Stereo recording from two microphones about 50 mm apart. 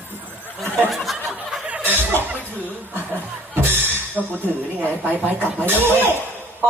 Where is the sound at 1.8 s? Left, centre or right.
Right.